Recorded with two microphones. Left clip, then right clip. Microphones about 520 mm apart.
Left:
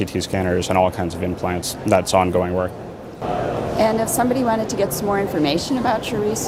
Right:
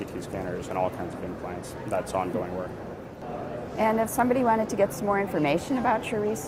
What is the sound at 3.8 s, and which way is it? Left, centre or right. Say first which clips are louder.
A woman's voice: left 5 dB; right.